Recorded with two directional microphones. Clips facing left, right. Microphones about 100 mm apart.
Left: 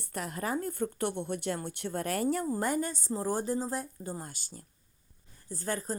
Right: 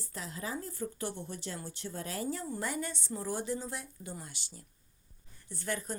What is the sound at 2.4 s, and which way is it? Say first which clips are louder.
Speech: left 6 dB; 45° left (ahead or behind).